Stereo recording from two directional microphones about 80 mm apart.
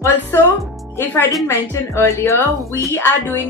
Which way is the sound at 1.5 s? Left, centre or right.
Left.